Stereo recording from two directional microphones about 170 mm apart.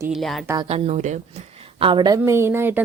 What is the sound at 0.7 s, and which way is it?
A woman's voice, 40° right (ahead or behind).